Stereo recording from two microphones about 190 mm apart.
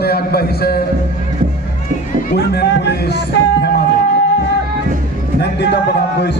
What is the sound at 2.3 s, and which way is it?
Speech, 55° left (ahead or behind).